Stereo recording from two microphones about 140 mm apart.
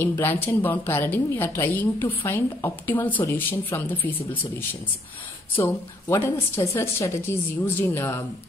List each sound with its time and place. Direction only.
0.0 s a woman's voice: 15° left (ahead or behind)
6.2 s a woman's voice: 20° left (ahead or behind)